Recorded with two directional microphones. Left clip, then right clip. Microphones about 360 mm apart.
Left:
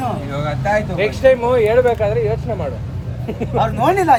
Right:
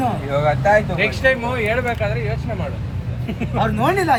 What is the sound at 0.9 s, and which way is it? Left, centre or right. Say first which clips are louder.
Speech: left 4 dB; centre.